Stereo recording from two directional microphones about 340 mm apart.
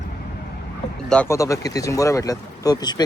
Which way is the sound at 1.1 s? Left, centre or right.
Centre.